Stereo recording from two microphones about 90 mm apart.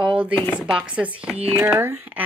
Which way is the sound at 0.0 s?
10° right (ahead or behind).